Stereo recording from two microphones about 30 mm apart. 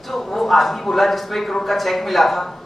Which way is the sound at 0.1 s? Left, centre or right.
Centre.